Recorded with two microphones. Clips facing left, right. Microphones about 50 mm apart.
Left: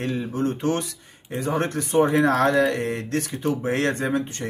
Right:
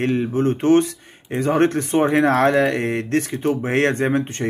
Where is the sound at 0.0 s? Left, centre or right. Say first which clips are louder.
Right 6 dB; right.